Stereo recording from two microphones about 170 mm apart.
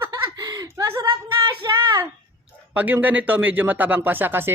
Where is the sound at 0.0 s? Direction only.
20° right (ahead or behind).